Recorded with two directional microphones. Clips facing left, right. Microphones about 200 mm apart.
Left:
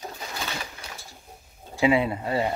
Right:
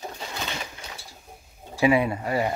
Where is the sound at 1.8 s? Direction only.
20° left (ahead or behind).